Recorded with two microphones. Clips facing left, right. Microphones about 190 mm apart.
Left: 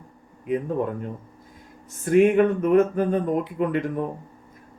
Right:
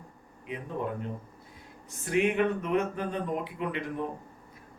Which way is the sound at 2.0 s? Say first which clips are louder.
Left 9 dB; 45° left (ahead or behind).